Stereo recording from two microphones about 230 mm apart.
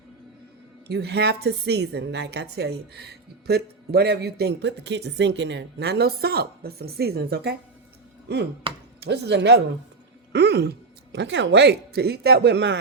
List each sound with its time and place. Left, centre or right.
0.9 s a woman's voice: right
8.7 s a sound: right
9.0 s a woman's voice: right